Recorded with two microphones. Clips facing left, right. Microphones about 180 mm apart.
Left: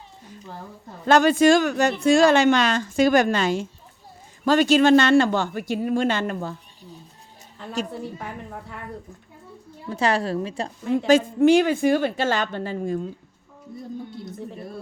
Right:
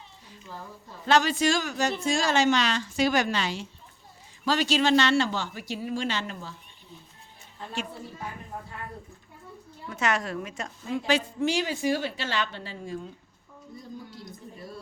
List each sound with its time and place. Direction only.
1.0 s speech: 50° left (ahead or behind)
9.8 s a woman's voice: 30° left (ahead or behind)
11.0 s speech: 50° left (ahead or behind)